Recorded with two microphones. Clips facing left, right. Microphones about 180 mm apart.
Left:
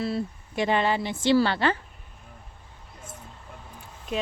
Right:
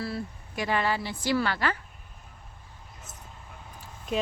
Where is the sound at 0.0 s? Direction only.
25° left (ahead or behind).